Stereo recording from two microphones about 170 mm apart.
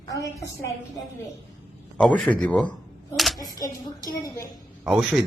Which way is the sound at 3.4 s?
20° left (ahead or behind).